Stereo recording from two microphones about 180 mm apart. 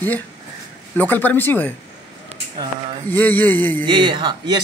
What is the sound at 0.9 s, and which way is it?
Speech, 10° left (ahead or behind).